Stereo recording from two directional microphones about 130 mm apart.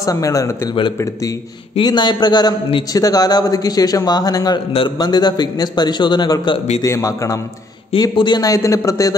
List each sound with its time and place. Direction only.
0.0 s a man's voice: 25° left (ahead or behind)
1.8 s a man's voice: 35° left (ahead or behind)